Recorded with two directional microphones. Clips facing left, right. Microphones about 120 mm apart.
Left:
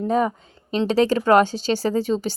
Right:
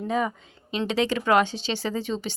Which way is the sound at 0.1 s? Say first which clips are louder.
Left 4 dB; 40° left (ahead or behind).